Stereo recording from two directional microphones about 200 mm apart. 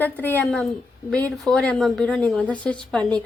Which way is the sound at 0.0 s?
10° left (ahead or behind).